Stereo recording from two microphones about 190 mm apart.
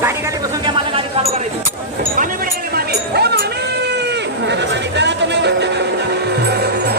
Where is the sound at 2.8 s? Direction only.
60° right (ahead or behind).